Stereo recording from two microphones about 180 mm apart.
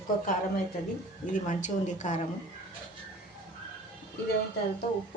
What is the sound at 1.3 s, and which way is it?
Speech, 40° left (ahead or behind).